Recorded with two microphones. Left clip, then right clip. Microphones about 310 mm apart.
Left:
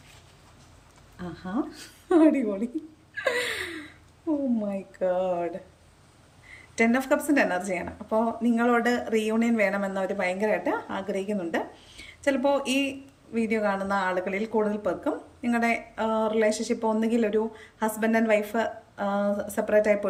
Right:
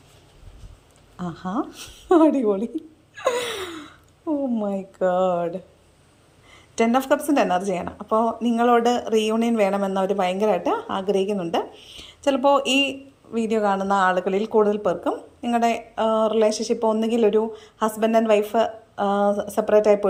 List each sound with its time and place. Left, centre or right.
1.2 s a woman's voice: centre
3.2 s gasp: centre
5.0 s a woman's voice: centre
6.7 s a woman's voice: centre